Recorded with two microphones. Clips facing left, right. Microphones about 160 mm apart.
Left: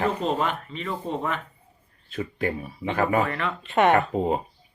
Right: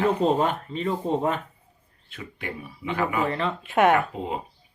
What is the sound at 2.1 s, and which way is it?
Speech, 40° left (ahead or behind).